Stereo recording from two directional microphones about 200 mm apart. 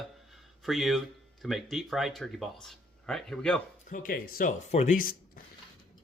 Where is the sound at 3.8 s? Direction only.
45° left (ahead or behind).